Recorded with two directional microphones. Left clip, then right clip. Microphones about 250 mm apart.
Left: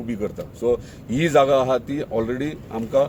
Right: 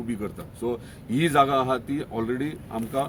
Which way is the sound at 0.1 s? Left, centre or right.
Centre.